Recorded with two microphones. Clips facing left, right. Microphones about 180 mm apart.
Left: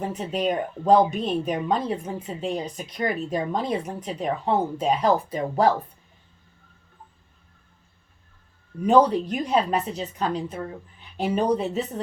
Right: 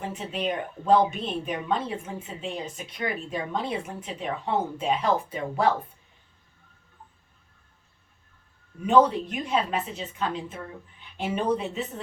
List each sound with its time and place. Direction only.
0.0 s speech: 40° left (ahead or behind)
8.9 s speech: 35° left (ahead or behind)